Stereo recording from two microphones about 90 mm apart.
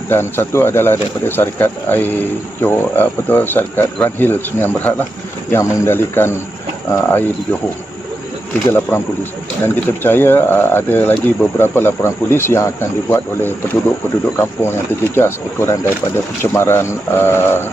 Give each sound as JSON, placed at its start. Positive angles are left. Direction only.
{"t": 0.1, "sound": "speech", "side_deg": 25}
{"t": 8.9, "sound": "speech", "side_deg": 25}